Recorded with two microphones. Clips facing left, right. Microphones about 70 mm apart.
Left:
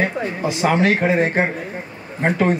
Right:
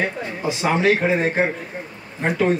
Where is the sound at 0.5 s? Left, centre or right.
Left.